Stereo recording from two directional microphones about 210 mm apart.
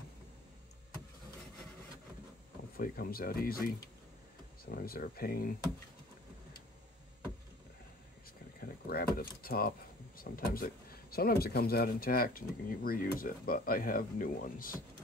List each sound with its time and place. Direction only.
2.8 s speech: 45° left (ahead or behind)
8.5 s speech: 45° left (ahead or behind)